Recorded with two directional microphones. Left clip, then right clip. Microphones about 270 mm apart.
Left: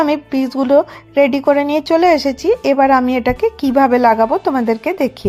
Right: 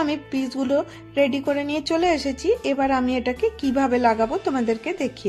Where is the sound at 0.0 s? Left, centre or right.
Centre.